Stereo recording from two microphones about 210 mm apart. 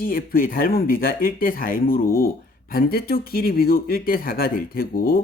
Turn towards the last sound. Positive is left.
turn(degrees=45)  # may be behind; listen again after turning